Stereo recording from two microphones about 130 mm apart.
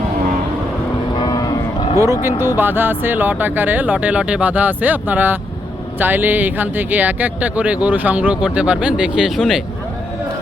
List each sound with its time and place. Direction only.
1.1 s vehicle: 35° left (ahead or behind)
2.0 s speech: 20° right (ahead or behind); by 9.6 s centre (ahead or behind)